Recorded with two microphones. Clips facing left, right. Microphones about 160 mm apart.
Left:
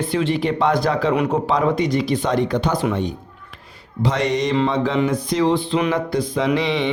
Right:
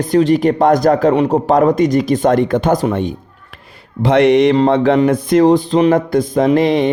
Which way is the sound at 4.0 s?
60° right (ahead or behind).